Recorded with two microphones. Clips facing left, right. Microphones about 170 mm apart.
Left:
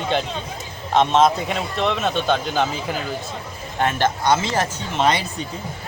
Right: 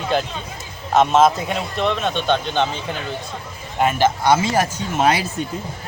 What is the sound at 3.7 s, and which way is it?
Speech, 5° right (ahead or behind).